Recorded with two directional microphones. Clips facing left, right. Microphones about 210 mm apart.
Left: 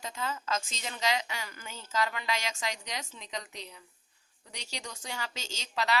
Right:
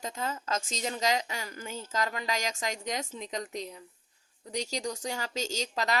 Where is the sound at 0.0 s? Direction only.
40° right (ahead or behind).